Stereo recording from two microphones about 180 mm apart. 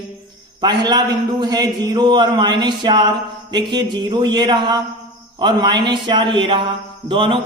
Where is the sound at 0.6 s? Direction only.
25° right (ahead or behind).